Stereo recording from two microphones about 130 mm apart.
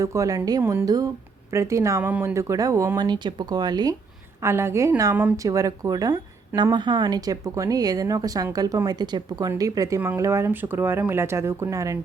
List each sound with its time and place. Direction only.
0.0 s speech: 25° right (ahead or behind)
3.0 s speech: 35° right (ahead or behind)
4.4 s speech: 20° right (ahead or behind)